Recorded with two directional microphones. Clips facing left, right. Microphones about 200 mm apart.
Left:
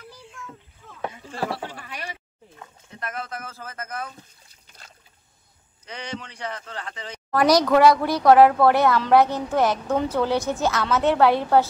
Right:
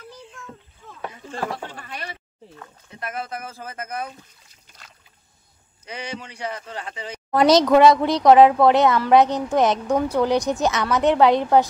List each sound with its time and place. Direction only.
1.7 s liquid: 10° left (ahead or behind)
3.0 s a woman's voice: 10° right (ahead or behind)
5.9 s a woman's voice: 10° right (ahead or behind)